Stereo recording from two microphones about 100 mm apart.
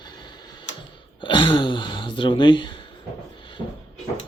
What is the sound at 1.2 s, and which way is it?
Speech, 55° left (ahead or behind).